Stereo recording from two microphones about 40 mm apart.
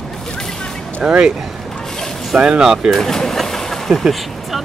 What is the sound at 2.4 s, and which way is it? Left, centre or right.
Speech, centre.